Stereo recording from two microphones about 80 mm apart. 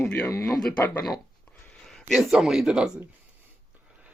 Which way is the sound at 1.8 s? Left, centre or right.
Centre.